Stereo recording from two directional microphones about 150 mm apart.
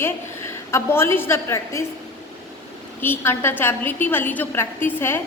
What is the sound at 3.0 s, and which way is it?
A woman's voice, 15° left (ahead or behind).